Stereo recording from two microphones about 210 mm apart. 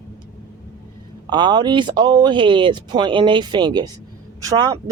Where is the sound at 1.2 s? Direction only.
20° right (ahead or behind).